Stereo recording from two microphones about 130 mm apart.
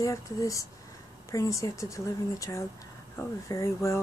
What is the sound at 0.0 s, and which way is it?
Speech, 25° left (ahead or behind).